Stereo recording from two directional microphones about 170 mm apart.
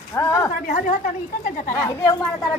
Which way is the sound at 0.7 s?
50° left (ahead or behind).